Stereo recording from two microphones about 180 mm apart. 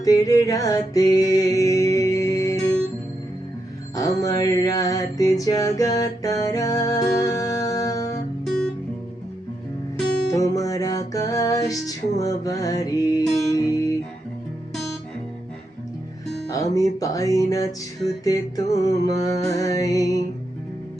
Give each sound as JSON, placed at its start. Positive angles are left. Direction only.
{"t": 0.0, "sound": "music", "side_deg": 20}
{"t": 3.9, "sound": "music", "side_deg": 20}
{"t": 10.3, "sound": "music", "side_deg": 20}
{"t": 16.7, "sound": "music", "side_deg": 20}